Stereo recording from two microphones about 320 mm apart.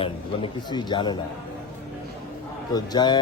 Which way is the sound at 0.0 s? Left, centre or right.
Centre.